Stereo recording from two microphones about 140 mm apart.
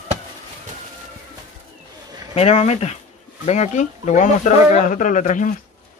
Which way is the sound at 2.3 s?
50° left (ahead or behind).